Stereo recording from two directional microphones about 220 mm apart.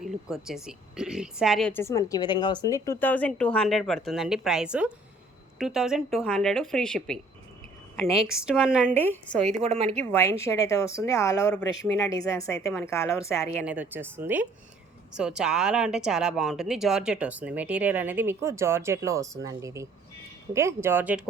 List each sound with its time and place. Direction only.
0.3 s speech: centre (ahead or behind)
8.9 s speech: 10° left (ahead or behind)
9.6 s speech: 30° right (ahead or behind)
10.1 s speech: 10° left (ahead or behind)
13.7 s speech: 10° right (ahead or behind)